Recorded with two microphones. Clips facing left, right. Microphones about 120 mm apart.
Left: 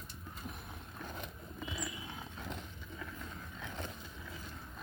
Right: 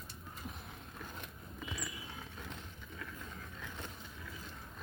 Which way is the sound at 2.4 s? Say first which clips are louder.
Left 3 dB; 15° left (ahead or behind).